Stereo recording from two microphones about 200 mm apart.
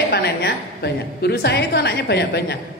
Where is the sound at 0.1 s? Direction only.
55° left (ahead or behind).